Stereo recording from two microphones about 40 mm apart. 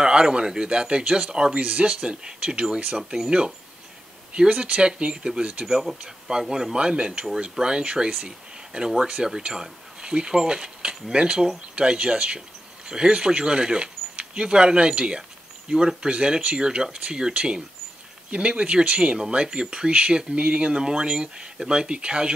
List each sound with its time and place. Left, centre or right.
0.0 s speech: right
1.6 s speech: right
5.7 s speech: centre
18.3 s speech: right